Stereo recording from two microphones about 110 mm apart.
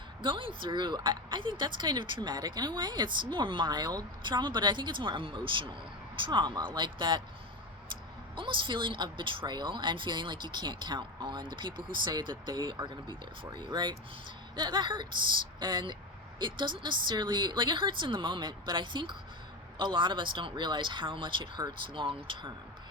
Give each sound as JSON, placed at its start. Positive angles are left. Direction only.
{"t": 0.2, "sound": "speech", "side_deg": -45}
{"t": 8.4, "sound": "speech", "side_deg": -50}